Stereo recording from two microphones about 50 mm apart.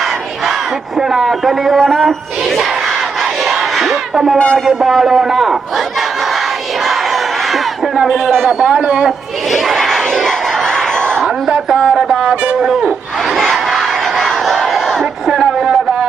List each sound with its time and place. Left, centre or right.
0.9 s a man's voice: centre
3.4 s battle cry: centre
4.4 s speech: centre
4.6 s a man's voice: centre
8.0 s a man's voice: centre
9.7 s crowd: centre
11.4 s speech: centre
13.3 s battle cry: centre
15.3 s a sound: centre